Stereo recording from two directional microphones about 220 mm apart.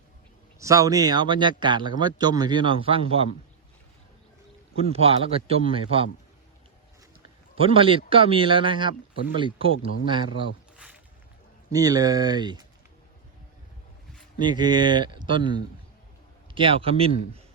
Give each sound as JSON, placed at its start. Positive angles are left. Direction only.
{"t": 0.6, "sound": "speech", "side_deg": -15}
{"t": 4.8, "sound": "speech", "side_deg": -25}
{"t": 7.6, "sound": "speech", "side_deg": -25}
{"t": 11.7, "sound": "speech", "side_deg": -15}
{"t": 14.3, "sound": "speech", "side_deg": -20}